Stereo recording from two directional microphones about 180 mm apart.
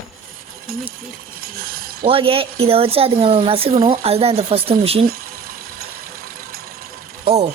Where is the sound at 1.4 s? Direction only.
55° right (ahead or behind).